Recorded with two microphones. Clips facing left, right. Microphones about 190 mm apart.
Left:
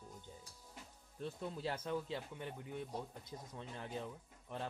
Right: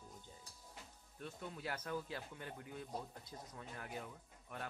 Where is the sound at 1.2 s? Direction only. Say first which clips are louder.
Left 5 dB; 30° left (ahead or behind).